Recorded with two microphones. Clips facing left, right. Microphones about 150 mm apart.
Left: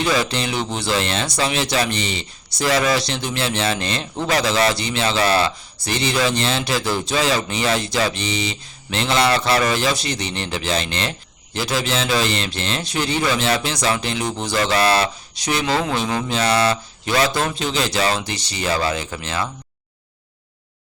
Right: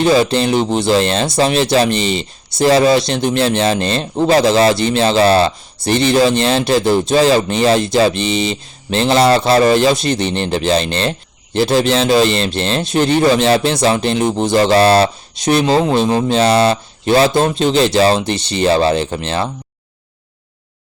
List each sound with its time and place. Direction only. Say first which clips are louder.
0.0 s speech: right 8 dB; 30° right (ahead or behind)
3.2 s speech: right 10 dB; 50° right (ahead or behind)
3.6 s speech: right 7 dB; 30° right (ahead or behind)
5.8 s speech: right 9 dB; 55° right (ahead or behind)
6.4 s speech: right 8 dB; 30° right (ahead or behind)
13.0 s speech: right 9 dB; 55° right (ahead or behind)
13.2 s speech: right 8 dB; 30° right (ahead or behind)
18.3 s speech: right 10 dB; 60° right (ahead or behind)
18.6 s speech: right 9 dB; 30° right (ahead or behind)